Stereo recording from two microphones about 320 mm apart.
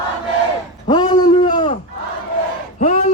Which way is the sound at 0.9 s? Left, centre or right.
Centre.